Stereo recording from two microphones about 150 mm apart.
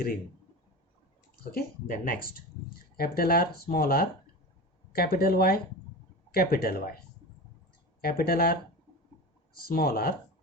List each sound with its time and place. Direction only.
1.5 s speech: 75° left (ahead or behind)
8.0 s speech: 90° left
9.6 s speech: 90° left